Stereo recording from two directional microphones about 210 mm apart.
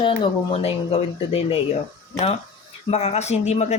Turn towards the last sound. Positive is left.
turn(degrees=30)  # may be behind; listen again after turning